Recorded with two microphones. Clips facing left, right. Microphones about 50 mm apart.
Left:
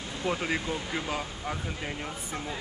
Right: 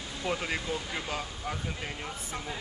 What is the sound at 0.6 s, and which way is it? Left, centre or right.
Speech, left.